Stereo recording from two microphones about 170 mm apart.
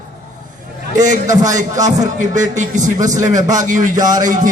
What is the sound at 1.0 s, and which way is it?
Speech, 45° right (ahead or behind).